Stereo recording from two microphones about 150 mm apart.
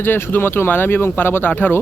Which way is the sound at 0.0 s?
15° left (ahead or behind).